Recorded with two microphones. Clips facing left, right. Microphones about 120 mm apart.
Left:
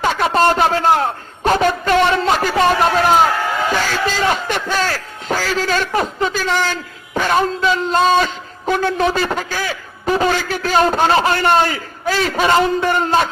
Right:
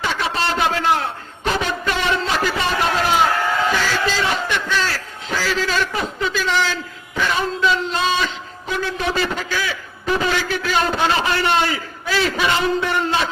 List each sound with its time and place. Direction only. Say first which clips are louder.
0.0 s a man's voice: left 7 dB; 45° left (ahead or behind)